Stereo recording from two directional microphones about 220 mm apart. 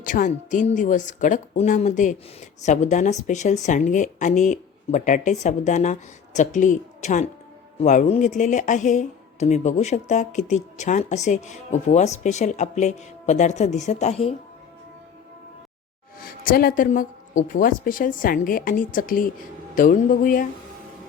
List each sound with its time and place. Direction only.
0.0 s speech: 35° left (ahead or behind)
16.1 s speech: 40° left (ahead or behind)